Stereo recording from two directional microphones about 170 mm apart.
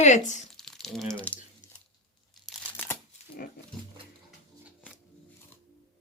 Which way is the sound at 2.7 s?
10° left (ahead or behind).